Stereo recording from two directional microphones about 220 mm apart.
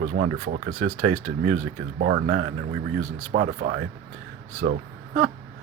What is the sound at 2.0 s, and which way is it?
Speech, 50° right (ahead or behind).